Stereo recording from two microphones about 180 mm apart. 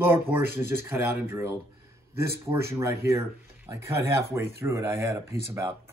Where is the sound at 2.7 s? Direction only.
15° right (ahead or behind).